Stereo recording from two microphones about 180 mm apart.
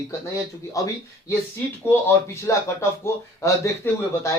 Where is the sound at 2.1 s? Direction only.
15° left (ahead or behind).